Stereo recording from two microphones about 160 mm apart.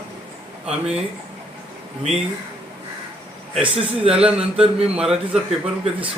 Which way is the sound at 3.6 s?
40° right (ahead or behind).